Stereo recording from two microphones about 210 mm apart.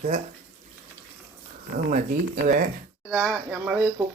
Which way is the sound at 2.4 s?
40° right (ahead or behind).